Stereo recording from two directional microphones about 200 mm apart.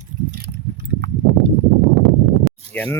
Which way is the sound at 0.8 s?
60° right (ahead or behind).